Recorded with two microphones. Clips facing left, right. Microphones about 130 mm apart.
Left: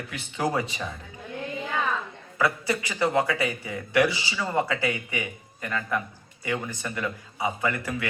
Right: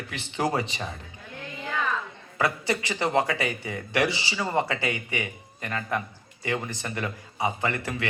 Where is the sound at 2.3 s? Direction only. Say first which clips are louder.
Left 1 dB; 25° right (ahead or behind).